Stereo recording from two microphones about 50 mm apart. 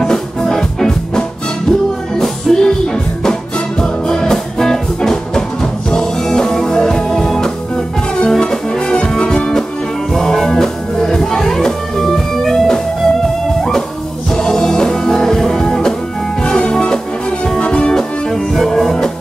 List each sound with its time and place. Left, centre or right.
0.0 s music: centre
14.3 s music: centre
18.3 s music: centre